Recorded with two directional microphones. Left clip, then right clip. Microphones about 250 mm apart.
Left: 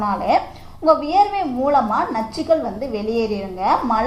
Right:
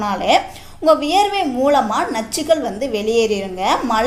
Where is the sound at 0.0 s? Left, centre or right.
Right.